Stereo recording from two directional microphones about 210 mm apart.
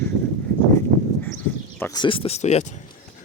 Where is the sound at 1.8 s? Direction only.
20° left (ahead or behind).